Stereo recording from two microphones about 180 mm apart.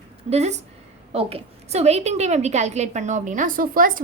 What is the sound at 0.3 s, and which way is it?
A woman's voice, 35° right (ahead or behind).